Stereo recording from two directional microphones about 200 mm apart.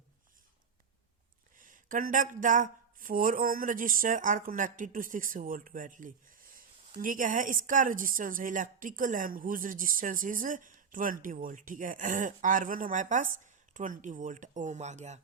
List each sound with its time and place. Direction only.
1.5 s a woman's voice: 40° right (ahead or behind)